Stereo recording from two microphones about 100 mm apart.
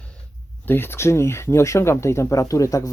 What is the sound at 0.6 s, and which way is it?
Speech, 20° left (ahead or behind).